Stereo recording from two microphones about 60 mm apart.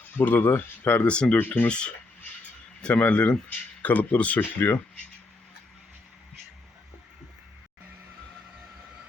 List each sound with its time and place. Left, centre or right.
0.2 s speech: left
1.0 s speech: centre
1.4 s speech: left
1.6 s speech: centre